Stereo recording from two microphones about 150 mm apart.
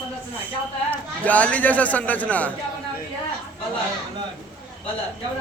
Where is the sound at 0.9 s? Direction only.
10° left (ahead or behind).